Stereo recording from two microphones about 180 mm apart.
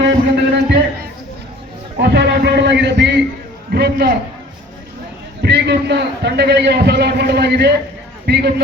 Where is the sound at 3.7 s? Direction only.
60° right (ahead or behind).